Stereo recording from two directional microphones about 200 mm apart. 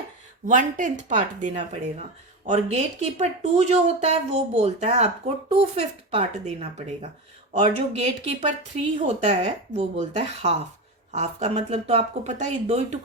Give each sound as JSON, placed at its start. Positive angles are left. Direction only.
{"t": 0.4, "sound": "speech", "side_deg": -40}